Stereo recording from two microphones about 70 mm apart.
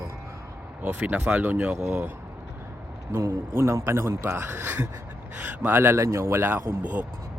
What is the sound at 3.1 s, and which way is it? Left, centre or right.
A man's voice, right.